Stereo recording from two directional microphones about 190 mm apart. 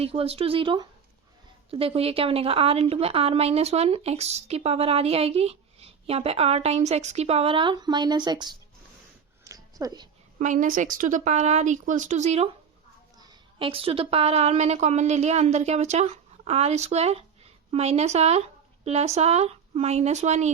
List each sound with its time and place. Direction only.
0.0 s a woman's voice: 30° right (ahead or behind)
9.4 s a sound: 20° right (ahead or behind)
10.3 s a woman's voice: 40° right (ahead or behind)
13.1 s a woman's voice: 25° right (ahead or behind)